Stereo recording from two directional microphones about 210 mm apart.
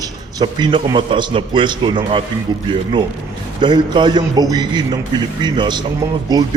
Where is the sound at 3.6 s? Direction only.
20° right (ahead or behind).